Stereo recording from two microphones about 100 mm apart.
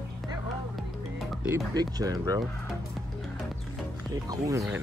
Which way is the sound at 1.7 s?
40° right (ahead or behind).